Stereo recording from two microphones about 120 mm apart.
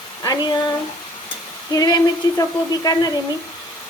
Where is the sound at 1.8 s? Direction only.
30° left (ahead or behind).